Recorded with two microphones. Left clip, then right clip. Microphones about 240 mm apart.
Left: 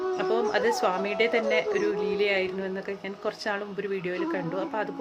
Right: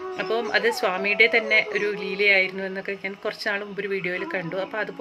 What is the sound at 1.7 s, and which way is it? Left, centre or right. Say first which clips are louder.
Speech: right 1 dB; left.